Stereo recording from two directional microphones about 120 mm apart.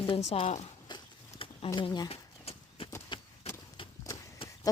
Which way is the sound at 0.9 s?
45° left (ahead or behind).